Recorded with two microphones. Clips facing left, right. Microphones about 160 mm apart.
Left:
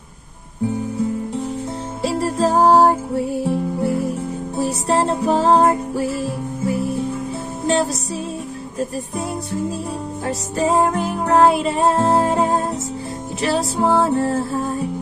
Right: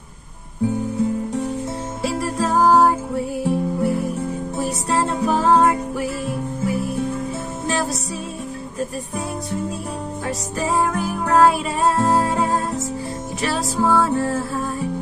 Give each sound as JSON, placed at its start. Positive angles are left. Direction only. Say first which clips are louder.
{"t": 2.0, "sound": "music", "louder": "left 4 dB", "side_deg": 30}
{"t": 4.8, "sound": "music", "louder": "left 2 dB", "side_deg": 30}
{"t": 7.6, "sound": "music", "louder": "left 5 dB", "side_deg": 30}
{"t": 10.2, "sound": "music", "louder": "left 5 dB", "side_deg": 30}